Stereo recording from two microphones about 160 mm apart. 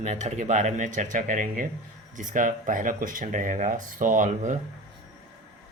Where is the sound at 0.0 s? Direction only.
45° right (ahead or behind).